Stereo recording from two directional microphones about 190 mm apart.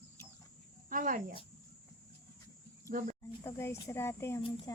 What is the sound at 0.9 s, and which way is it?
Speech, 45° right (ahead or behind).